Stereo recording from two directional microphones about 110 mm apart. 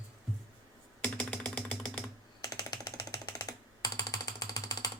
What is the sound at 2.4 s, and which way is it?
Typing, 35° left (ahead or behind).